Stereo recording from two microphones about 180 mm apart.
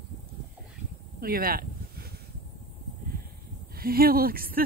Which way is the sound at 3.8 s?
55° right (ahead or behind).